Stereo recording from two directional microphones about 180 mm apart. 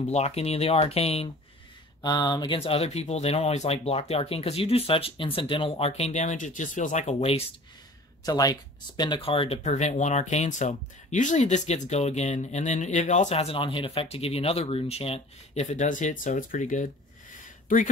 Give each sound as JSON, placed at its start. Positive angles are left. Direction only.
{"t": 0.0, "sound": "speech", "side_deg": 35}
{"t": 2.0, "sound": "speech", "side_deg": 20}
{"t": 8.3, "sound": "speech", "side_deg": 20}